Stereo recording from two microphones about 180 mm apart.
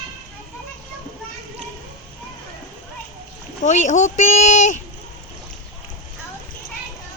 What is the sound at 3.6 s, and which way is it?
Speech, 40° left (ahead or behind).